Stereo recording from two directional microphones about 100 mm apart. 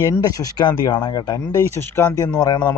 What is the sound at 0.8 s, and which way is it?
Speech, 50° left (ahead or behind).